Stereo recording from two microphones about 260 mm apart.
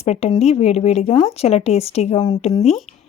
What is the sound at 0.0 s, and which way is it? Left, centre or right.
Speech, left.